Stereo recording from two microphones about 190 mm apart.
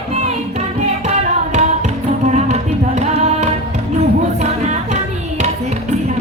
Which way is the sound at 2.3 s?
35° right (ahead or behind).